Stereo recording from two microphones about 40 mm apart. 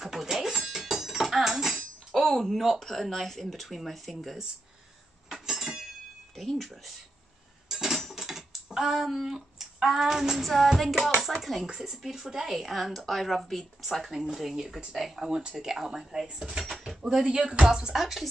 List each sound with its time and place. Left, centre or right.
0.0 s a sound: centre
2.1 s speech: centre
5.3 s chink: centre
7.6 s a sound: centre
10.8 s speech: centre
11.6 s speech: centre
17.9 s speech: centre